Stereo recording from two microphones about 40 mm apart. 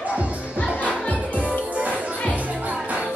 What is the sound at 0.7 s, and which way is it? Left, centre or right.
Music, left.